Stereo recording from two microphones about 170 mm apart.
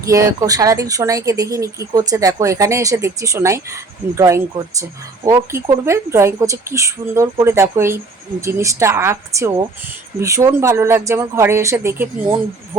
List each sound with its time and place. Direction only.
0.0 s speech: 20° right (ahead or behind)